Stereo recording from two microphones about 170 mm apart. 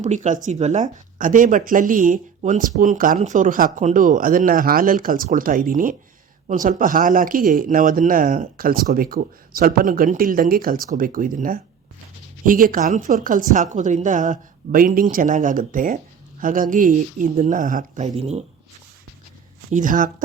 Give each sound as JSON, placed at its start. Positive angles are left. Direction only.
{"t": 0.0, "sound": "speech", "side_deg": -45}
{"t": 19.7, "sound": "speech", "side_deg": -50}